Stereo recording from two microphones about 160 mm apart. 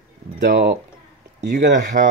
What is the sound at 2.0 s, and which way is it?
Speech, 55° right (ahead or behind).